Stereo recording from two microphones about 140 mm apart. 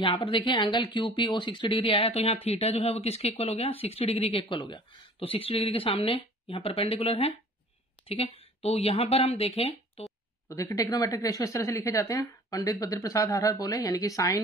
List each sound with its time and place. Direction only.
0.0 s speech: 35° left (ahead or behind)
10.5 s a woman's voice: 25° left (ahead or behind)